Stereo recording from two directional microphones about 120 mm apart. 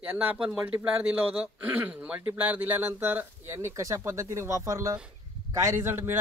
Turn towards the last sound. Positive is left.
turn(degrees=-20)  # may be behind; listen again after turning